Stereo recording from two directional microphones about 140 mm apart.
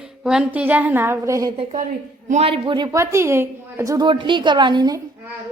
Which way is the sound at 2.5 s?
35° right (ahead or behind).